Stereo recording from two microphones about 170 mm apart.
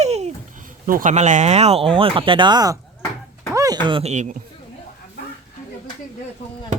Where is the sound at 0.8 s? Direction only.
50° right (ahead or behind); by 2.8 s 20° right (ahead or behind).